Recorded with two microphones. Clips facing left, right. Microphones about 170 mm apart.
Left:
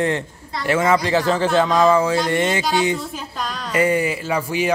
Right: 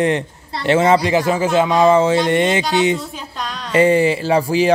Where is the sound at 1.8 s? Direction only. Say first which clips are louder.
Right 3 dB; 25° right (ahead or behind).